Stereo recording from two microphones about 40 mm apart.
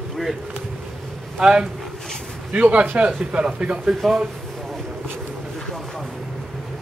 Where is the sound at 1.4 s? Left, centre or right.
Centre.